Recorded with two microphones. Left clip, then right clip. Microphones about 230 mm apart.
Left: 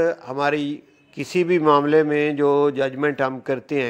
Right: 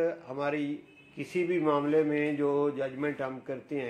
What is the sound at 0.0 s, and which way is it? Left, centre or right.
A man's voice, left.